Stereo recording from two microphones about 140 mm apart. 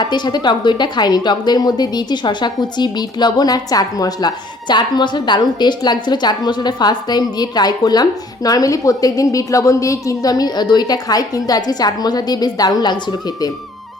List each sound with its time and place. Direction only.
0.0 s a woman's voice: 30° left (ahead or behind)